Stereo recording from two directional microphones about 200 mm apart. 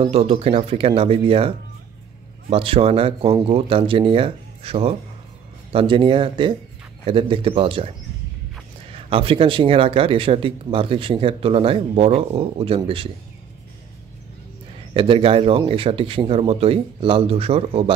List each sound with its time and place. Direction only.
0.0 s speech: 30° right (ahead or behind)
2.5 s speech: 30° right (ahead or behind)
8.9 s speech: 30° right (ahead or behind)
15.0 s speech: 25° right (ahead or behind)